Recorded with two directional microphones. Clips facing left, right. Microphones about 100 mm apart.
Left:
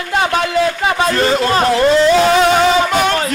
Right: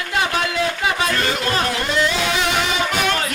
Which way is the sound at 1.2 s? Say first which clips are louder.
Left 7 dB; 35° left (ahead or behind).